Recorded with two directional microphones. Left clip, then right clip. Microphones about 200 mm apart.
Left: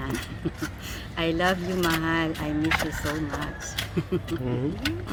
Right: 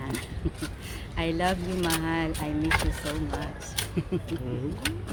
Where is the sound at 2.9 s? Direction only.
25° right (ahead or behind).